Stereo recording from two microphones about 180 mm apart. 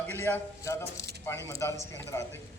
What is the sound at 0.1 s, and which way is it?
A man's voice, 10° left (ahead or behind).